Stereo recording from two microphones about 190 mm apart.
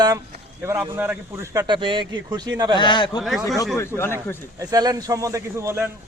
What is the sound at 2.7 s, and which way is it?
Speech, 25° left (ahead or behind).